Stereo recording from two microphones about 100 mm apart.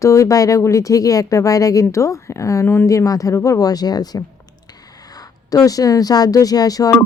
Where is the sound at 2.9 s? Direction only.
35° left (ahead or behind).